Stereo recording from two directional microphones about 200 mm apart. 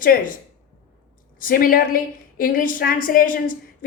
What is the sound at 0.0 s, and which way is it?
Speech, 45° left (ahead or behind).